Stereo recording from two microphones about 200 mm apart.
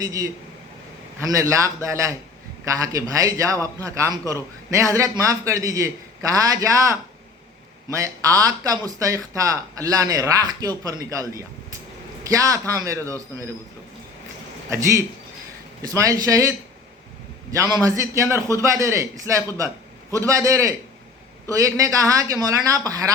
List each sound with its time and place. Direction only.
0.0 s speech: 15° right (ahead or behind)
14.7 s speech: 15° right (ahead or behind)